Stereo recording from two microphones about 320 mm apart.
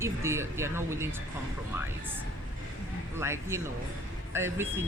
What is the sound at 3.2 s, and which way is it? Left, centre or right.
Speech, centre.